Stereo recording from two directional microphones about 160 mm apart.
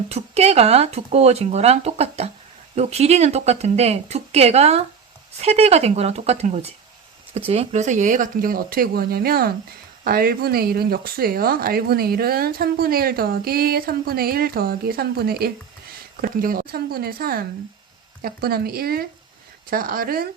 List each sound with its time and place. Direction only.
0.1 s speech: 40° right (ahead or behind); by 20.2 s 65° right (ahead or behind)